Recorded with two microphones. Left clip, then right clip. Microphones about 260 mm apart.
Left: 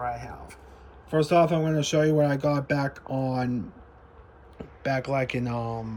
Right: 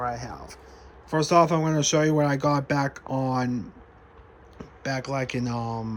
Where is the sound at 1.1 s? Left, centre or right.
Centre.